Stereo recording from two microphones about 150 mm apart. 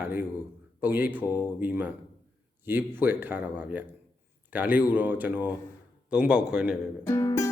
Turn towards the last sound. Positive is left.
turn(degrees=20)  # may be behind; listen again after turning